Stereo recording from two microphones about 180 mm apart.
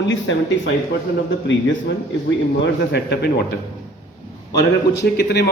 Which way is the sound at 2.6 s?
70° left (ahead or behind).